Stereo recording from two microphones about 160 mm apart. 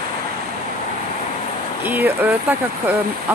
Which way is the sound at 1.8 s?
10° right (ahead or behind).